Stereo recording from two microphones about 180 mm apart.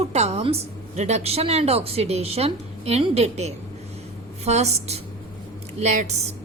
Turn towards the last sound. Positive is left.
turn(degrees=-40)  # may be behind; listen again after turning